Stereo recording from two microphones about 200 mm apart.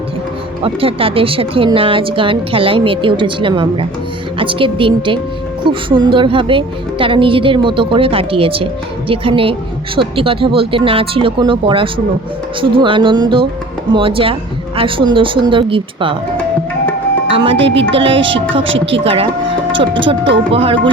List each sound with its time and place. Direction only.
0.6 s speech: 25° right (ahead or behind)
17.2 s speech: 25° right (ahead or behind)
18.6 s speech: 70° right (ahead or behind)
19.0 s speech: 30° right (ahead or behind)